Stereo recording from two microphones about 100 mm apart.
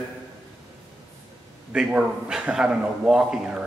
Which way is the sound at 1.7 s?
10° right (ahead or behind).